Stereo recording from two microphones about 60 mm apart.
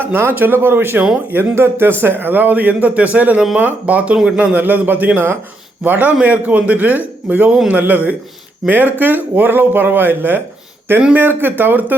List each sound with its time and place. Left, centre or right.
0.0 s a man's voice: right